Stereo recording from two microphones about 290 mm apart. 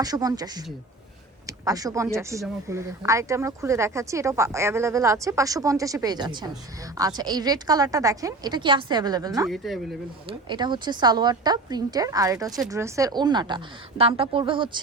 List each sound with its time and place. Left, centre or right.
0.0 s speech: centre
9.5 s speech: centre
10.2 s speech: centre